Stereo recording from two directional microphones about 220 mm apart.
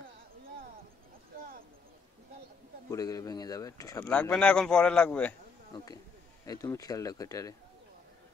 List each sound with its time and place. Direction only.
2.9 s speech: 15° left (ahead or behind)
5.7 s speech: 20° left (ahead or behind)